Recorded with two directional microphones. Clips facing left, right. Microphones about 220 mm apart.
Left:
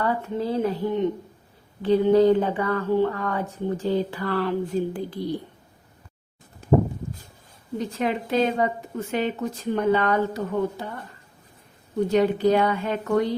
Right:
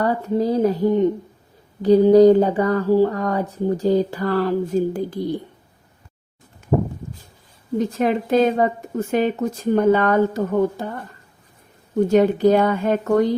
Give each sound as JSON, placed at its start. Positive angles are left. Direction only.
{"t": 0.0, "sound": "speech", "side_deg": -40}
{"t": 6.6, "sound": "a sound", "side_deg": 35}
{"t": 7.8, "sound": "speech", "side_deg": -45}
{"t": 12.0, "sound": "speech", "side_deg": -45}